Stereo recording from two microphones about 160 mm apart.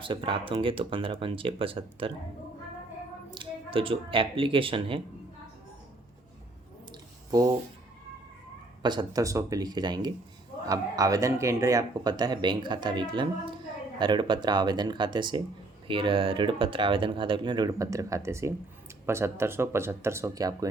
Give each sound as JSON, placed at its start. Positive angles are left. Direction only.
{"t": 0.0, "sound": "speech", "side_deg": -30}
{"t": 3.2, "sound": "speech", "side_deg": -30}
{"t": 6.9, "sound": "a sound", "side_deg": -25}
{"t": 8.8, "sound": "speech", "side_deg": -30}